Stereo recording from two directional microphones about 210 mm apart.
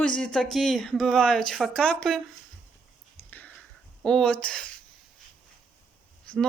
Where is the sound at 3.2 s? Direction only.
10° left (ahead or behind).